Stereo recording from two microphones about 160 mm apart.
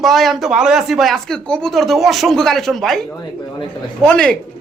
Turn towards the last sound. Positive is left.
turn(degrees=5)  # may be behind; listen again after turning